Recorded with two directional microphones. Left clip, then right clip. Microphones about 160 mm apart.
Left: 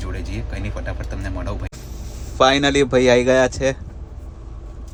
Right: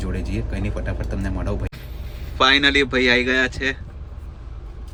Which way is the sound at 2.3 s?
30° left (ahead or behind).